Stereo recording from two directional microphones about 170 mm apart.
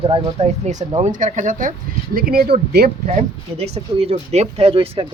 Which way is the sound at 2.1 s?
60° right (ahead or behind).